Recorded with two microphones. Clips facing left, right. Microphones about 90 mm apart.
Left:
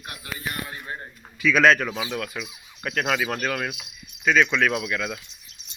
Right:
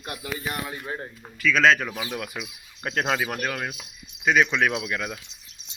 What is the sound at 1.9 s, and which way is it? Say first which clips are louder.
Speech: left 3 dB; 20° left (ahead or behind).